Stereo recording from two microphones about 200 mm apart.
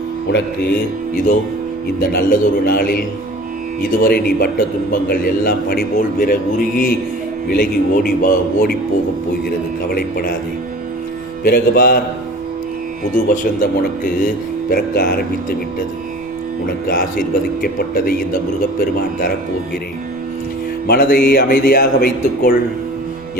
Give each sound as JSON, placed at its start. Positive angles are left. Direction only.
{"t": 0.3, "sound": "a man's voice", "side_deg": 55}
{"t": 9.9, "sound": "a man's voice", "side_deg": 45}
{"t": 11.4, "sound": "a man's voice", "side_deg": 50}
{"t": 13.2, "sound": "a man's voice", "side_deg": 45}
{"t": 17.6, "sound": "a man's voice", "side_deg": 45}
{"t": 20.8, "sound": "a man's voice", "side_deg": 50}